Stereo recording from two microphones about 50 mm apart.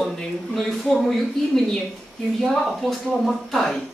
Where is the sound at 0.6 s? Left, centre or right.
Centre.